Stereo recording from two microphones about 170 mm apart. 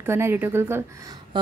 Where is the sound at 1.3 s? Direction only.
25° right (ahead or behind).